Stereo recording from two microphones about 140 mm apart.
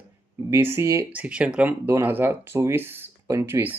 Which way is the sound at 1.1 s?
10° right (ahead or behind).